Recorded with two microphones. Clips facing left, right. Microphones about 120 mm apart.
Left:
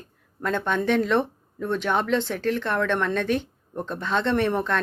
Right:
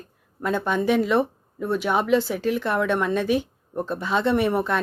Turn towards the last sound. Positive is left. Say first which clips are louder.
# right 2 dB
turn(degrees=-10)  # may be behind; listen again after turning